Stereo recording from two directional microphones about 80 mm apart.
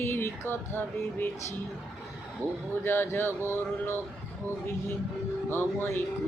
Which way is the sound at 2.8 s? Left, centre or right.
Left.